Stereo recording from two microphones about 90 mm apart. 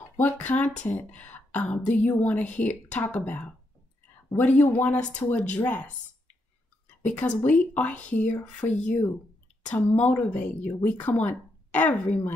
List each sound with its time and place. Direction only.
0.2 s speech: 15° left (ahead or behind)
7.0 s speech: 15° left (ahead or behind)